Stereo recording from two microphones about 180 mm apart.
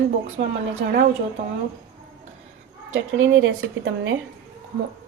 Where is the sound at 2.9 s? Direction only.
90° right.